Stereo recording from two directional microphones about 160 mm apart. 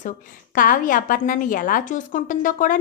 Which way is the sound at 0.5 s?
55° left (ahead or behind).